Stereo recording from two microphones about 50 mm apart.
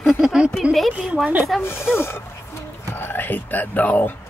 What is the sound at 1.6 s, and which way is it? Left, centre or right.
Speech, left.